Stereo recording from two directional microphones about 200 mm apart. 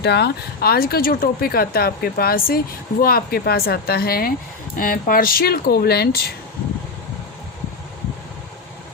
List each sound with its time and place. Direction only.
0.0 s speech: 55° left (ahead or behind)